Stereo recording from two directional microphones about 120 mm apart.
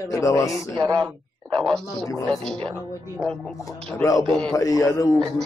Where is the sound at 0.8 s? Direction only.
35° right (ahead or behind).